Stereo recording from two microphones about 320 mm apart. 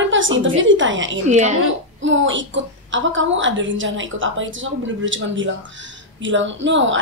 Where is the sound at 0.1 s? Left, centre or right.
Right.